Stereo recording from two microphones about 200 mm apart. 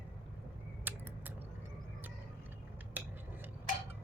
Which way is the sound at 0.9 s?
10° right (ahead or behind).